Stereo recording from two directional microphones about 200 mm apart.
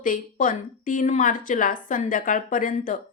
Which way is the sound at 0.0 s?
40° left (ahead or behind).